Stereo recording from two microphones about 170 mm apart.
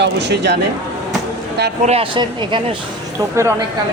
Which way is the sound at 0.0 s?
90° right.